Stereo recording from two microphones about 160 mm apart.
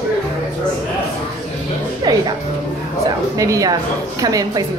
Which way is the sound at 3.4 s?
20° right (ahead or behind).